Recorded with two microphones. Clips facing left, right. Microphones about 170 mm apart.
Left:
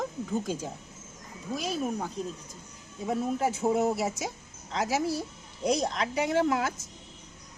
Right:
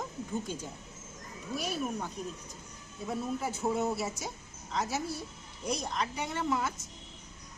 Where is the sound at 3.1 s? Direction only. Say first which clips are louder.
Left 6 dB; 90° left.